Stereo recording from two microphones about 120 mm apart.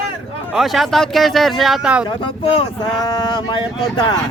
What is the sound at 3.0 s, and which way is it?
Speech, 35° left (ahead or behind).